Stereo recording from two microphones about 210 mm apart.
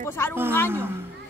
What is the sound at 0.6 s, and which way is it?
Speech, 10° right (ahead or behind).